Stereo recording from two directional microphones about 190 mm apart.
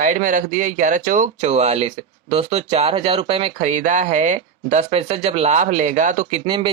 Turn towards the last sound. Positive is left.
turn(degrees=-25)  # may be behind; listen again after turning